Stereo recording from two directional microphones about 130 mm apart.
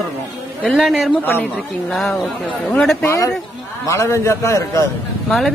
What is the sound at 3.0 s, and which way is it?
A man's voice, 20° left (ahead or behind).